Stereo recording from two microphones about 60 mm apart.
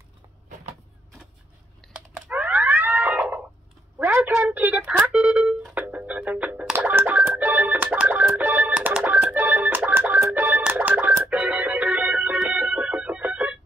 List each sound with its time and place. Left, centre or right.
2.0 s computer keyboard: centre
4.0 s a sound: right
5.1 s telephone dialing: centre
5.8 s music: right
11.2 s organ: right